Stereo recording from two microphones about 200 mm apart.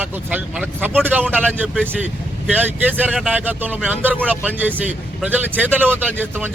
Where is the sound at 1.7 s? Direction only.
5° left (ahead or behind).